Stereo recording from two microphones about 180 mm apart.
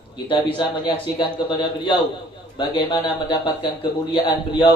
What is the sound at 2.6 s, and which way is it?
A man's voice, 25° left (ahead or behind).